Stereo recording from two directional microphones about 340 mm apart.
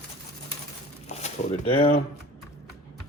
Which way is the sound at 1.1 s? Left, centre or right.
Centre.